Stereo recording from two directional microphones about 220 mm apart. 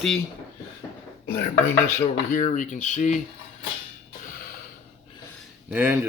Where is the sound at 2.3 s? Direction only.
35° left (ahead or behind).